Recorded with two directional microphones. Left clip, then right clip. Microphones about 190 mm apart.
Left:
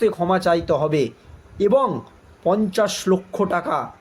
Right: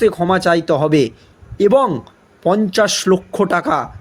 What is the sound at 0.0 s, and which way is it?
Speech, 45° right (ahead or behind).